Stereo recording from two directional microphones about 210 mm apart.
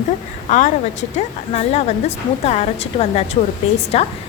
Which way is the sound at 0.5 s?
35° left (ahead or behind).